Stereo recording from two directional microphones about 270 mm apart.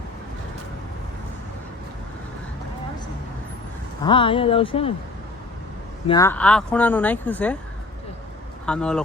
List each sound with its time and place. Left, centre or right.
4.0 s speech: centre
6.1 s speech: centre
8.6 s speech: centre